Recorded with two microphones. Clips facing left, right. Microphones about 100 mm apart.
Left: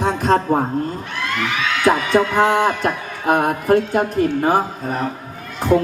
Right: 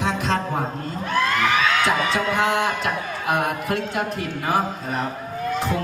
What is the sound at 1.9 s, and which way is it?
Speech, 45° left (ahead or behind).